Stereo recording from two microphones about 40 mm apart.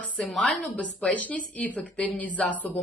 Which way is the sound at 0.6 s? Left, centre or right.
Left.